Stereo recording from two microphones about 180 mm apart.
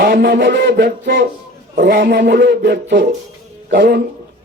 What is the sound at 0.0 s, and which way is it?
A man's voice, 60° right (ahead or behind).